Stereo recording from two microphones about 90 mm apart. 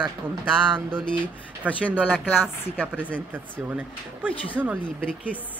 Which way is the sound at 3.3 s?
20° right (ahead or behind).